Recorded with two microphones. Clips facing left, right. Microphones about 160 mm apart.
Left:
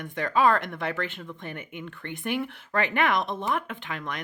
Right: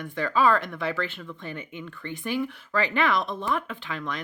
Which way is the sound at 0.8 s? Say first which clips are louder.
Right 1 dB; 50° left (ahead or behind).